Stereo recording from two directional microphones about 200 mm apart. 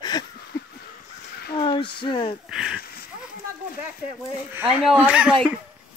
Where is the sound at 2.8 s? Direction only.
50° left (ahead or behind).